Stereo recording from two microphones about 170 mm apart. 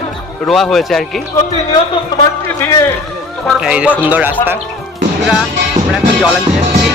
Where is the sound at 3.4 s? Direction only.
5° right (ahead or behind).